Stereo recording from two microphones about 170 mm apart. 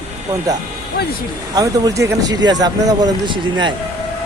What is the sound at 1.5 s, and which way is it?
Speech, 20° right (ahead or behind).